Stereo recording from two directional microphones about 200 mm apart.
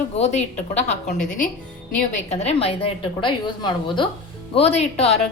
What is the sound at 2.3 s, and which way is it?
A woman's voice, 30° left (ahead or behind).